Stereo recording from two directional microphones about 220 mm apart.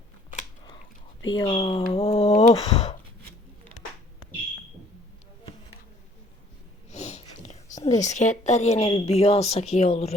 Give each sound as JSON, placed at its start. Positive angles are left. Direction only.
{"t": 1.3, "sound": "speech", "side_deg": 25}
{"t": 6.9, "sound": "whispering", "side_deg": 30}
{"t": 7.8, "sound": "a sound", "side_deg": 15}
{"t": 8.0, "sound": "speech", "side_deg": 30}